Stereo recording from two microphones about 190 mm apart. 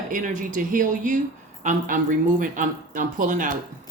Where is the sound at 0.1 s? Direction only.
45° right (ahead or behind).